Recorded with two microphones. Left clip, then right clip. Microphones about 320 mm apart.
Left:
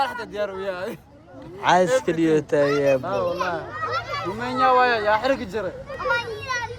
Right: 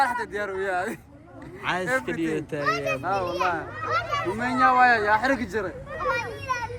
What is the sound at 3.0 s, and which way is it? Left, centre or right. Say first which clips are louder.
Speech: left 1 dB; centre.